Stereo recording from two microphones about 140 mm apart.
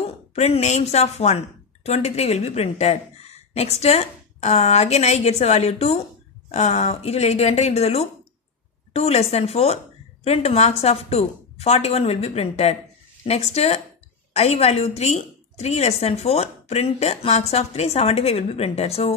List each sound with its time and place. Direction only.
0.3 s a woman's voice: 50° left (ahead or behind)